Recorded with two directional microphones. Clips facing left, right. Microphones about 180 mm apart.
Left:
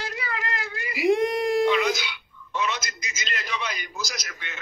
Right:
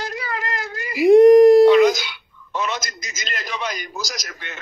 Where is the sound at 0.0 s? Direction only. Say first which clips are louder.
Right 4 dB; 45° right (ahead or behind).